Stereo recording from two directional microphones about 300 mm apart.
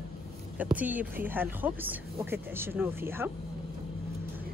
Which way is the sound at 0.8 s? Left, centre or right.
Centre.